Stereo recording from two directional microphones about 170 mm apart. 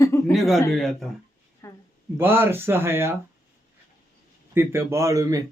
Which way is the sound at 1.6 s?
15° left (ahead or behind).